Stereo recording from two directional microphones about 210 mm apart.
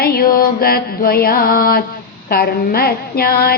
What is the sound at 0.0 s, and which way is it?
A woman's voice, 45° left (ahead or behind).